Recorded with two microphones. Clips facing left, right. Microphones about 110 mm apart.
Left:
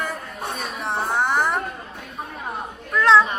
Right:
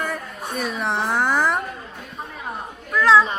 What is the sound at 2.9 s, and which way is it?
Speech, centre (ahead or behind).